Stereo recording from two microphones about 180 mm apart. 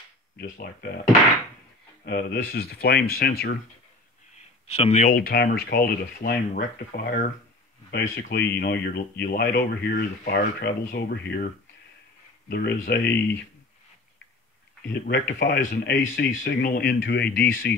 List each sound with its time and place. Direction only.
0.4 s speech: 55° left (ahead or behind)
2.0 s speech: 60° left (ahead or behind)
4.6 s speech: 35° left (ahead or behind)
5.1 s speech: 60° left (ahead or behind)
7.9 s speech: 65° left (ahead or behind)
12.4 s speech: 55° left (ahead or behind)
14.9 s speech: 65° left (ahead or behind)
17.0 s speech: 70° left (ahead or behind)